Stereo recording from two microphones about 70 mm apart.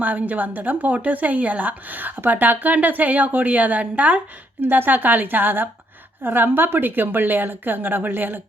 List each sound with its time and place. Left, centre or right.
0.0 s a woman's voice: right